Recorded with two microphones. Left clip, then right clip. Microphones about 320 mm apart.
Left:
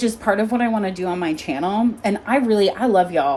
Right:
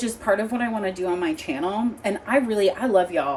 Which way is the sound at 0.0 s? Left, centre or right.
Left.